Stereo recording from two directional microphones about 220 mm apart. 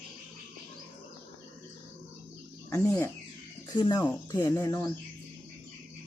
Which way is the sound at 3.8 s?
20° left (ahead or behind).